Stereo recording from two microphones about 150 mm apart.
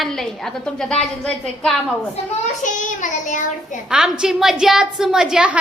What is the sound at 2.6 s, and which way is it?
Child singing, 55° left (ahead or behind).